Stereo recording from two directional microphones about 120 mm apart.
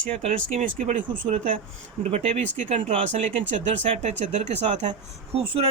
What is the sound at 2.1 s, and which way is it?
Speech, 65° right (ahead or behind).